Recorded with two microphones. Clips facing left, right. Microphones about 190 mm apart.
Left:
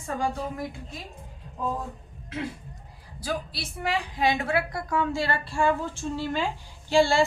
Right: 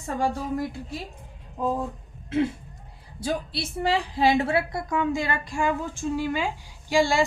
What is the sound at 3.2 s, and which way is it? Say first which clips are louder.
A woman's voice: right 3 dB; 25° right (ahead or behind).